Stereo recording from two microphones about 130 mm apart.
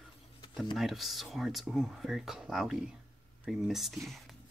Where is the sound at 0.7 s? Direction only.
Centre (ahead or behind).